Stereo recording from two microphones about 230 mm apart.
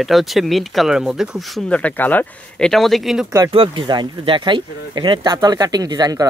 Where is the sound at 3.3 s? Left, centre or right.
Right.